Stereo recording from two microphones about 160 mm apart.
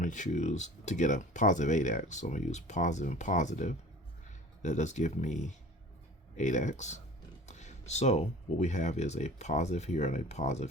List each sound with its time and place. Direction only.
0.0 s speech: 50° left (ahead or behind)